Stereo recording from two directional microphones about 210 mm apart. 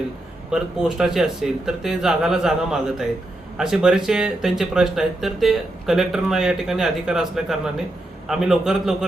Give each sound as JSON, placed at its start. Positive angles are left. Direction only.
{"t": 0.5, "sound": "speech", "side_deg": -5}